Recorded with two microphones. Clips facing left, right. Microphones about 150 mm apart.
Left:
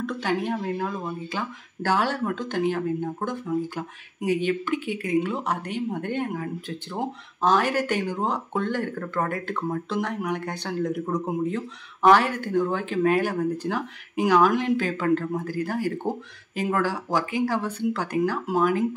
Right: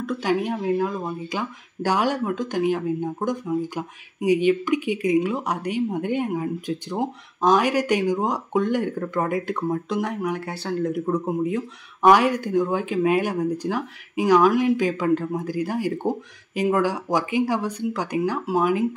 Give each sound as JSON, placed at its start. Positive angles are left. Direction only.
{"t": 0.0, "sound": "speech", "side_deg": -10}